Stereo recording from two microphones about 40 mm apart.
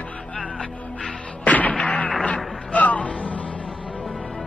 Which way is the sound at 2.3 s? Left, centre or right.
Left.